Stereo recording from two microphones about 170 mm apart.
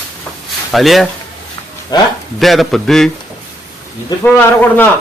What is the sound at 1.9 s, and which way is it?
Speech, 25° left (ahead or behind).